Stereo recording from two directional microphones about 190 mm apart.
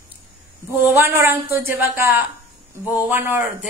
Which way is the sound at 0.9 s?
15° right (ahead or behind).